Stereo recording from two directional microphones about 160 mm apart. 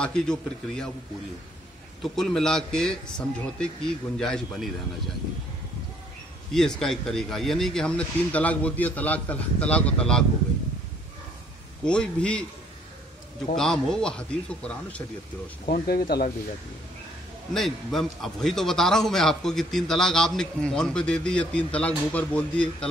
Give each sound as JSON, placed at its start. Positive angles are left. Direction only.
{"t": 0.0, "sound": "a man's voice", "side_deg": 5}
{"t": 2.1, "sound": "a man's voice", "side_deg": 0}
{"t": 6.5, "sound": "a man's voice", "side_deg": 5}
{"t": 11.8, "sound": "a man's voice", "side_deg": 5}
{"t": 13.6, "sound": "a man's voice", "side_deg": 5}
{"t": 15.6, "sound": "speech", "side_deg": 65}
{"t": 17.6, "sound": "a man's voice", "side_deg": 0}